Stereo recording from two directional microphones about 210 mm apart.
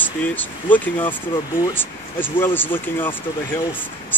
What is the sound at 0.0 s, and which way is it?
Speech, 10° left (ahead or behind).